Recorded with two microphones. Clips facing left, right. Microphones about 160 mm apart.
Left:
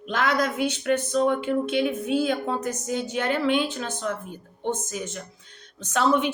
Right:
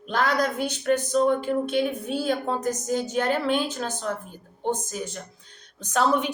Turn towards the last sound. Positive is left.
turn(degrees=-40)  # may be behind; listen again after turning